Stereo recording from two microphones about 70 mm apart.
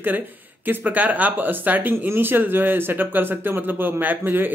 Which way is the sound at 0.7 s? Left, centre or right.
Right.